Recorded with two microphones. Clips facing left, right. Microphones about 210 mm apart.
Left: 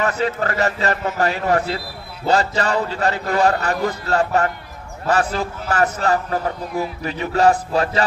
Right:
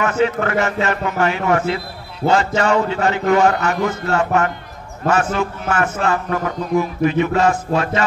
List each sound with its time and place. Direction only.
0.0 s a man's voice: 35° left (ahead or behind)